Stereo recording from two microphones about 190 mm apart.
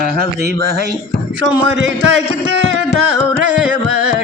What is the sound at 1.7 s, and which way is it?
Speech, 75° right (ahead or behind).